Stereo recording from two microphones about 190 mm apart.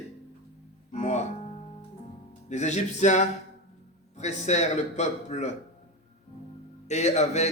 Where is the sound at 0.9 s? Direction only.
35° left (ahead or behind).